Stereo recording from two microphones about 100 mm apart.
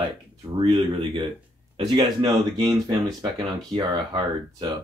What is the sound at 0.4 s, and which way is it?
Speech, 55° right (ahead or behind).